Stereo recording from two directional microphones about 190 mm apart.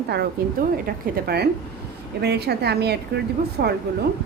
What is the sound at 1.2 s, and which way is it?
A woman's voice, 60° right (ahead or behind).